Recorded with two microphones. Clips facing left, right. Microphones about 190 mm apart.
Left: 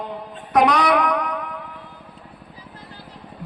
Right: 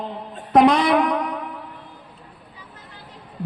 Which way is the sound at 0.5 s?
25° right (ahead or behind).